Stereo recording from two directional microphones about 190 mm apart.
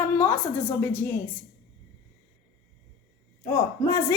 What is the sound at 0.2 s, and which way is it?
Speech, 10° left (ahead or behind).